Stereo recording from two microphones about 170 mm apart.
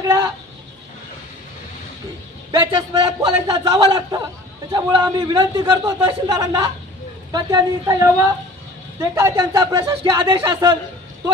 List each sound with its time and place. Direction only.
2.5 s a man's voice: 25° right (ahead or behind)